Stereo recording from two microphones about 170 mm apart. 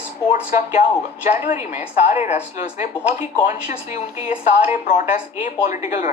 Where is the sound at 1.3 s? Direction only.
45° left (ahead or behind).